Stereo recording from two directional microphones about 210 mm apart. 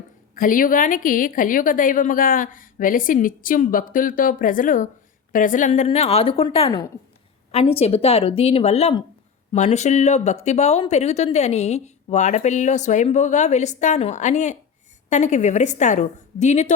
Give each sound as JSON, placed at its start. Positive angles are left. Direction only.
{"t": 0.3, "sound": "a woman's voice", "side_deg": 40}